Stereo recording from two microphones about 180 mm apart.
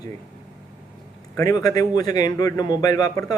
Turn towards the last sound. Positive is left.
turn(degrees=20)  # may be behind; listen again after turning